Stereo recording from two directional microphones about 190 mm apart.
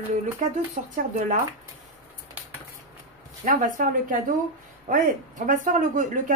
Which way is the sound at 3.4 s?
45° right (ahead or behind).